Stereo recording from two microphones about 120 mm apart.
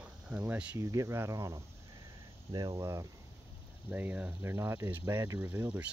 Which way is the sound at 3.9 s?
10° right (ahead or behind).